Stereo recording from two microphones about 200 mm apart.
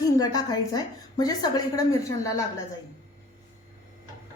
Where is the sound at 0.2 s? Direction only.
20° left (ahead or behind).